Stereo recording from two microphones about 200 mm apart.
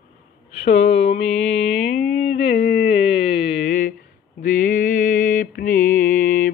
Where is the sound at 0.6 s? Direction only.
60° left (ahead or behind).